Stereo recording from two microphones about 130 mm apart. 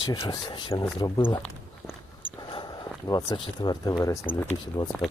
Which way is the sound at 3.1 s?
30° left (ahead or behind).